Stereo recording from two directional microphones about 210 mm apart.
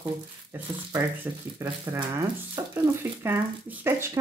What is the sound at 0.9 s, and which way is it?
Speech, 10° right (ahead or behind).